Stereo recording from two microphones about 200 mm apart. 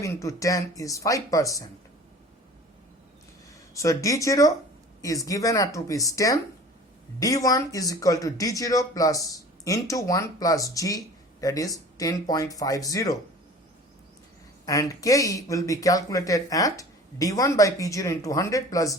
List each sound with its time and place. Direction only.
0.0 s speech: 15° left (ahead or behind)
3.8 s speech: 15° left (ahead or behind)
14.6 s speech: 15° left (ahead or behind)